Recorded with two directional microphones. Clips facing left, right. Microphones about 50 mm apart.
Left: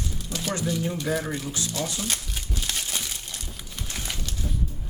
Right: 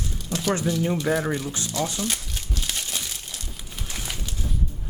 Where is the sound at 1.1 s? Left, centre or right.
Centre.